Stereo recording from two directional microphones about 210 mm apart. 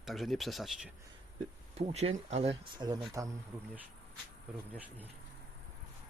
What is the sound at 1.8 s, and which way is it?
Speech, 30° right (ahead or behind).